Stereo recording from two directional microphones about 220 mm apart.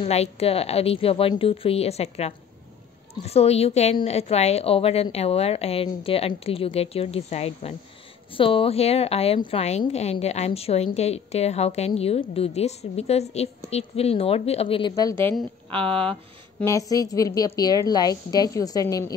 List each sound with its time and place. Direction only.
0.0 s a woman's voice: 30° left (ahead or behind); by 15.3 s 15° left (ahead or behind)
15.9 s speech: 25° right (ahead or behind)
16.5 s a woman's voice: 15° left (ahead or behind)